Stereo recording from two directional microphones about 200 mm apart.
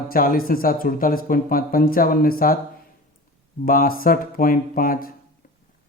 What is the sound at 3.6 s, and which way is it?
Speech, 45° left (ahead or behind).